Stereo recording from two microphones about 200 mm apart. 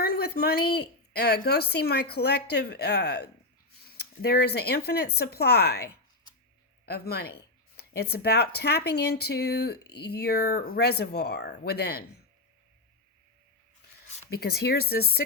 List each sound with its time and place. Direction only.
0.0 s a woman's voice: 50° left (ahead or behind)
14.3 s speech: 55° left (ahead or behind)